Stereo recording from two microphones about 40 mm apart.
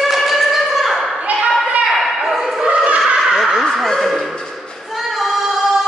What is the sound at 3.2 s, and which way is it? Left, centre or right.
Crow, centre.